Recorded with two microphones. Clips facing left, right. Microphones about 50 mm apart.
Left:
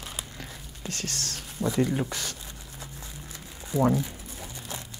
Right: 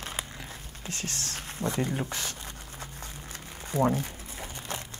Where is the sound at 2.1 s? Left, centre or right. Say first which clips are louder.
Even; right.